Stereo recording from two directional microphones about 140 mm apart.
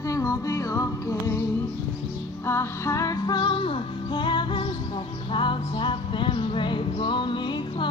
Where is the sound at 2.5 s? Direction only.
20° left (ahead or behind).